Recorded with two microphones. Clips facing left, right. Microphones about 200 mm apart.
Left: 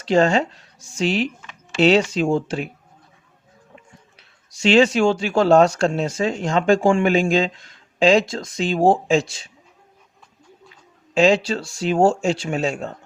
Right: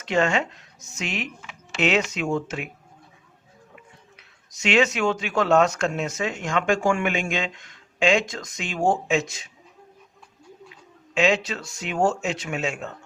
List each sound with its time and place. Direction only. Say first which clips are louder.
0.0 s speech: left 6 dB; 35° left (ahead or behind)
4.2 s speech: left 7 dB; 30° left (ahead or behind)
11.1 s speech: left 6 dB; 35° left (ahead or behind)